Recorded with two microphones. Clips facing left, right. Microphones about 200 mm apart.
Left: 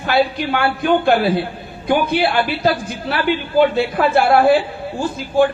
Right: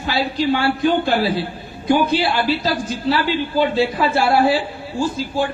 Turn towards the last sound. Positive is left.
turn(degrees=55)  # may be behind; listen again after turning